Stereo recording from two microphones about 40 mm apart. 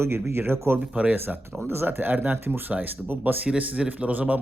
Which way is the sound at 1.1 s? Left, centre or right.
Right.